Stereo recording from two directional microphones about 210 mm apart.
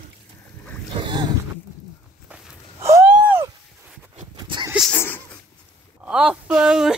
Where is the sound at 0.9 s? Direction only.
20° right (ahead or behind).